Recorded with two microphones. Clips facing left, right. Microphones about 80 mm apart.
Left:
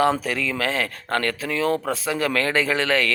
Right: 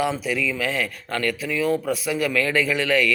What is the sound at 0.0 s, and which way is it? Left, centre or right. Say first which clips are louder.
A man's voice: left 3 dB; left.